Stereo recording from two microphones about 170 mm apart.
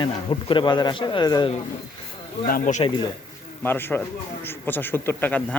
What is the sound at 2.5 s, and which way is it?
Speech, 50° left (ahead or behind).